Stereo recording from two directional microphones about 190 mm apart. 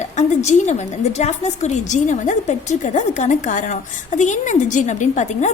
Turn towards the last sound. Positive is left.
turn(degrees=40)  # may be behind; listen again after turning